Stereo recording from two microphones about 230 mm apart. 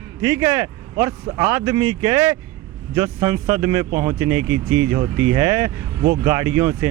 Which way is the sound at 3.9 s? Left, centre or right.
Right.